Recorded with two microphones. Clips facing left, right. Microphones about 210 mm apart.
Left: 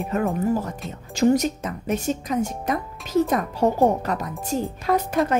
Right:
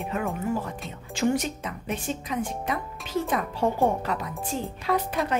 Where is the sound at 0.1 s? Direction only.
40° left (ahead or behind).